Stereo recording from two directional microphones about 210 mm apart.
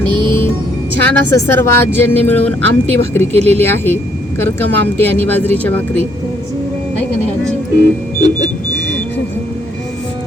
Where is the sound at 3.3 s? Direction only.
30° right (ahead or behind).